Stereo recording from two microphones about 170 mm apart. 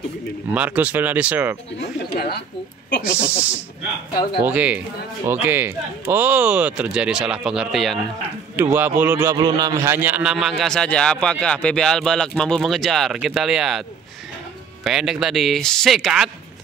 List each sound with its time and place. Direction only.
0.5 s speech: 10° right (ahead or behind)
1.8 s speech: 70° left (ahead or behind)
3.3 s speech: 10° right (ahead or behind)
8.5 s speech: 10° right (ahead or behind)
9.4 s a man's voice: 20° right (ahead or behind); by 16.3 s centre (ahead or behind)